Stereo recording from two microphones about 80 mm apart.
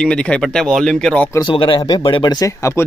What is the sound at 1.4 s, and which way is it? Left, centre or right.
Speech, left.